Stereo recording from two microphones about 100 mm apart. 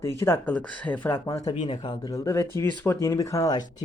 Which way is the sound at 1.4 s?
90° left.